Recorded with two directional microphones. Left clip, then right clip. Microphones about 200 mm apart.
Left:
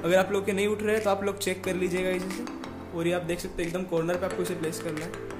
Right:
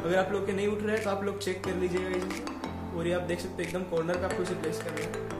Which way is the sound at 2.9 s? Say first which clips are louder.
Left 3 dB; 35° left (ahead or behind).